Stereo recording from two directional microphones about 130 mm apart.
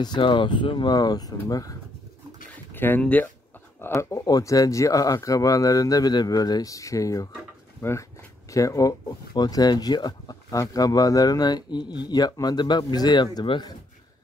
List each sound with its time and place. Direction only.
0.0 s speech: 35° left (ahead or behind)
2.5 s a sound: 15° left (ahead or behind)
3.8 s speech: 20° left (ahead or behind)